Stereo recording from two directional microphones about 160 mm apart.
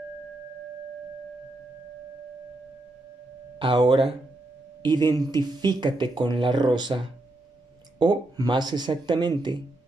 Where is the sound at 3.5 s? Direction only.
30° right (ahead or behind).